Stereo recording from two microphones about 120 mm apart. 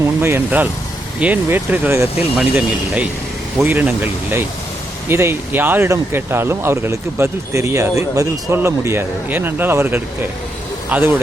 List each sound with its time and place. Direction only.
0.0 s speech: 20° right (ahead or behind)
2.3 s speech: 10° right (ahead or behind)